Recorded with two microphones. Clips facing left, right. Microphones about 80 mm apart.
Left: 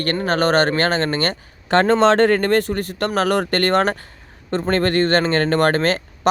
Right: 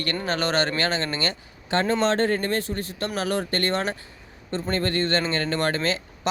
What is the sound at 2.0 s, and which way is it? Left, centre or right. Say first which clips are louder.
Speech: left 8 dB; left.